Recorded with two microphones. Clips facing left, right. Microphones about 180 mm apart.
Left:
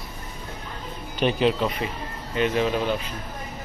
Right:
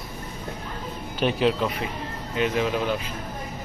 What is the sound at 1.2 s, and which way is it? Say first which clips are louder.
Speech: left 1 dB; centre (ahead or behind).